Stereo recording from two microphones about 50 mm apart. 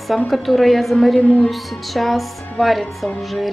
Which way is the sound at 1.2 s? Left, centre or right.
Left.